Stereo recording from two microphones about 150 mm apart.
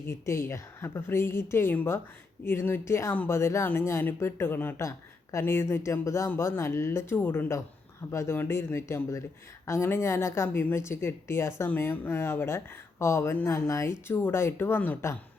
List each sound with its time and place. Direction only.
0.0 s a woman's voice: 20° left (ahead or behind)